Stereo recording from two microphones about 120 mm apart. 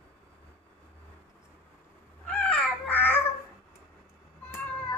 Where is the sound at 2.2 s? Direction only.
10° left (ahead or behind).